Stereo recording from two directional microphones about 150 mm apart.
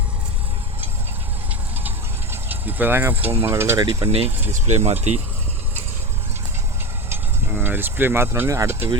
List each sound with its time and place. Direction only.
2.3 s speech: 10° right (ahead or behind)
4.0 s speech: 40° right (ahead or behind)
4.3 s speech: 15° right (ahead or behind)
4.5 s speech: 50° right (ahead or behind)
7.1 s speech: 15° right (ahead or behind)